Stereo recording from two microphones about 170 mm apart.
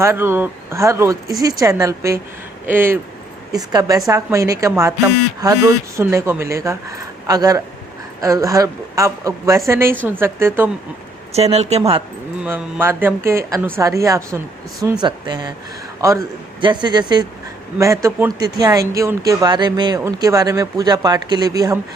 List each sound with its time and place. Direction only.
0.0 s speech: 15° right (ahead or behind)
11.3 s speech: 40° right (ahead or behind)
12.4 s a man's voice: 5° right (ahead or behind)
16.6 s speech: 30° right (ahead or behind)